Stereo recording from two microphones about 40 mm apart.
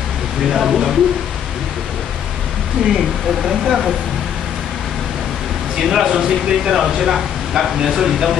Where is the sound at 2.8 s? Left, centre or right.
Right.